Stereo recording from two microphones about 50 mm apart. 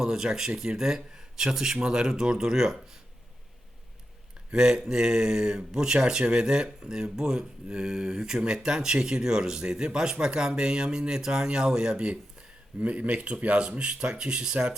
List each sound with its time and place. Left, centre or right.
0.0 s speech: centre
4.5 s speech: centre